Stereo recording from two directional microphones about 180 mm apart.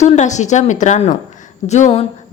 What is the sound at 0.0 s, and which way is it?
A woman's voice, 40° left (ahead or behind).